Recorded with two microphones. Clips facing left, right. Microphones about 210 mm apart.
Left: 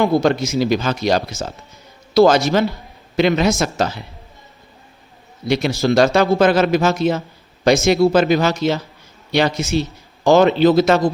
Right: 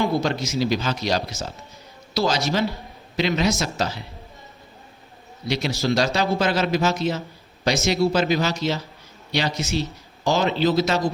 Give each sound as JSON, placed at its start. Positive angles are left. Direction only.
{"t": 0.0, "sound": "speech", "side_deg": 55}
{"t": 5.5, "sound": "speech", "side_deg": 55}